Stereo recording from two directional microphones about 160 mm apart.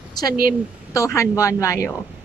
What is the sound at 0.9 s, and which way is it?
Music, 20° left (ahead or behind).